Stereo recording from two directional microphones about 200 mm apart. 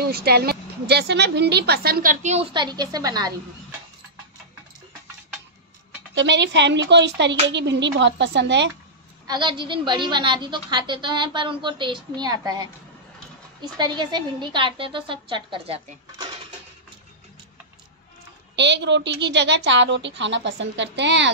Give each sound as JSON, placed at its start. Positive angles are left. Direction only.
{"t": 0.0, "sound": "a woman's voice", "side_deg": -50}
{"t": 2.5, "sound": "a woman's voice", "side_deg": -20}
{"t": 6.1, "sound": "a woman's voice", "side_deg": -65}
{"t": 9.3, "sound": "a woman's voice", "side_deg": -25}
{"t": 18.6, "sound": "a woman's voice", "side_deg": -60}